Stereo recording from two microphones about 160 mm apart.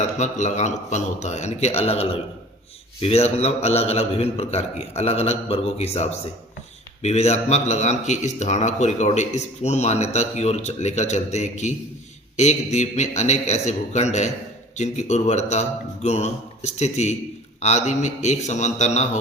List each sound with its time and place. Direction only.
0.2 s a man's voice: 45° left (ahead or behind)